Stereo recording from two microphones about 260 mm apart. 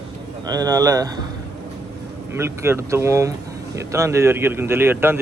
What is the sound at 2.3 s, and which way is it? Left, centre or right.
Speech, centre.